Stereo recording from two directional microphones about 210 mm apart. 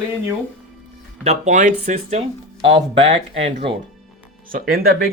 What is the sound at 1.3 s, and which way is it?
Speech, 35° right (ahead or behind).